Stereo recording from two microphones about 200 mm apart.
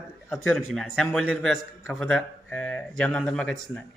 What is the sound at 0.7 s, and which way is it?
A man's voice, centre (ahead or behind).